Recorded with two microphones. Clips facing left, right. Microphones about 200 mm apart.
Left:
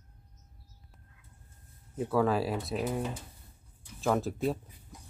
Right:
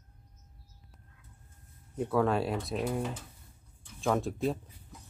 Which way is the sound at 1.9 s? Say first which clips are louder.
Even; centre (ahead or behind).